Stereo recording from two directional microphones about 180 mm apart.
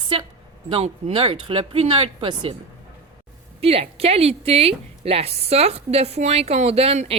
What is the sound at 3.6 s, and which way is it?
A woman's voice, 35° right (ahead or behind).